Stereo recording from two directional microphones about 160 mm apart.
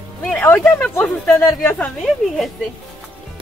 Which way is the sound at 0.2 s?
10° left (ahead or behind).